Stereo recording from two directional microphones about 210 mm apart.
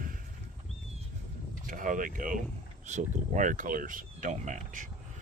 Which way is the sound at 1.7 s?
40° right (ahead or behind).